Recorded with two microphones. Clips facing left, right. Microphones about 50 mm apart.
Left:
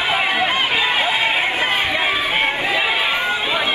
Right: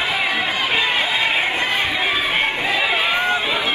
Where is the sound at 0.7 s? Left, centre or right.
Centre.